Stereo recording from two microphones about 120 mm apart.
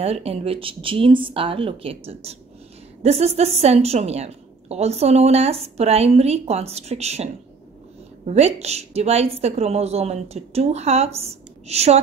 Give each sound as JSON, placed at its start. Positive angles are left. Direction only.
{"t": 0.0, "sound": "a woman's voice", "side_deg": -55}
{"t": 8.3, "sound": "a woman's voice", "side_deg": -65}